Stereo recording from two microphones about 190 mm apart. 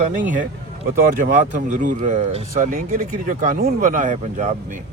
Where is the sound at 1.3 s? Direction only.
40° right (ahead or behind).